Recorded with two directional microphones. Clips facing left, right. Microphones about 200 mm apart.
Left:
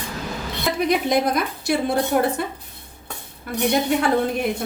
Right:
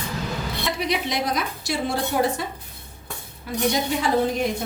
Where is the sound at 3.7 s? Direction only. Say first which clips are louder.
Left 8 dB; 60° left (ahead or behind).